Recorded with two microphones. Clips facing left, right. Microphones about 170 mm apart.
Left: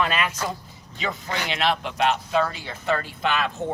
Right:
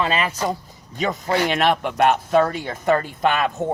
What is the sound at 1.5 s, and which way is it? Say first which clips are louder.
Speech: right 5 dB; 50° right (ahead or behind).